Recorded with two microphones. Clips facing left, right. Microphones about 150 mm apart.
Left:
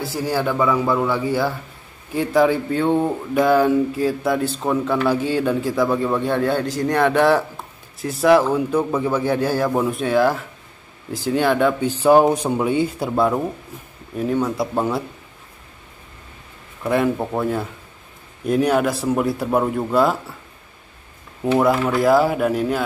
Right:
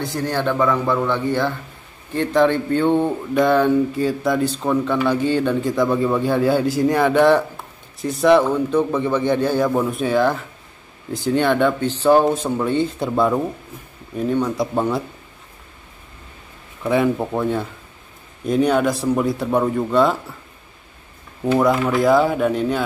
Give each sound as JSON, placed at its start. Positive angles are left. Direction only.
{"t": 0.0, "sound": "speech", "side_deg": 5}
{"t": 16.8, "sound": "speech", "side_deg": 0}
{"t": 21.5, "sound": "speech", "side_deg": 5}